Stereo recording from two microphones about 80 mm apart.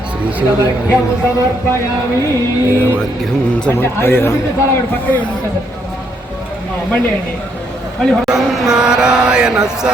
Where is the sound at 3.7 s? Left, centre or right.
Left.